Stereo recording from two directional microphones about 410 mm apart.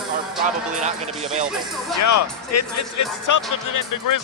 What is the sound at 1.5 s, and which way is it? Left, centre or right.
Speech, centre.